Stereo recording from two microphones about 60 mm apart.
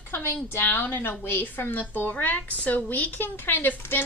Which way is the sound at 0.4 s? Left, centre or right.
Left.